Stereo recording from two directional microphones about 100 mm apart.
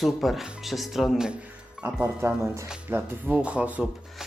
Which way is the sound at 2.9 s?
15° right (ahead or behind).